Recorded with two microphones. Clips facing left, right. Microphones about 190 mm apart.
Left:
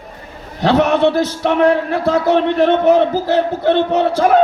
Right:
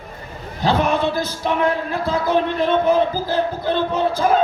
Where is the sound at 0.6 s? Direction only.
75° left (ahead or behind).